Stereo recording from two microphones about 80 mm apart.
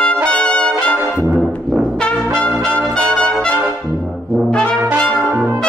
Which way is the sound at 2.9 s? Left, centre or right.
Centre.